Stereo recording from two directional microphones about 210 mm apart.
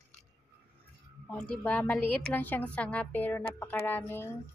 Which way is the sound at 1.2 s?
5° left (ahead or behind).